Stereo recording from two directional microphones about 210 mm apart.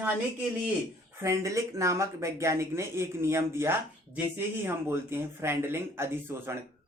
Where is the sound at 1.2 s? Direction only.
15° right (ahead or behind).